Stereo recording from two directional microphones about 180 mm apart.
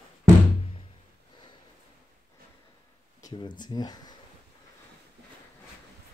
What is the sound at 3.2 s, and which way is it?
Speech, 25° left (ahead or behind).